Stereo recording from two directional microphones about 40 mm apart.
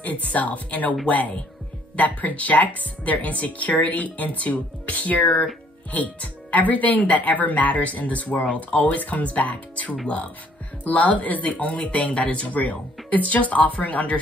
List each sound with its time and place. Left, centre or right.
0.0 s speech: left